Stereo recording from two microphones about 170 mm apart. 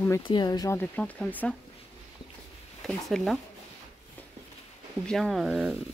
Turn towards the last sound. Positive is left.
turn(degrees=-5)  # may be behind; listen again after turning